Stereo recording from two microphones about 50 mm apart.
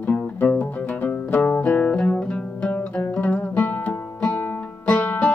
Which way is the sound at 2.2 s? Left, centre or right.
Centre.